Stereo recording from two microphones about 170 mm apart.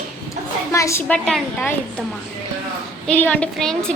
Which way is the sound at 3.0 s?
10° left (ahead or behind).